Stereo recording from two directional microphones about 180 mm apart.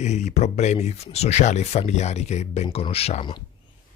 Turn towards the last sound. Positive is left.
turn(degrees=30)  # may be behind; listen again after turning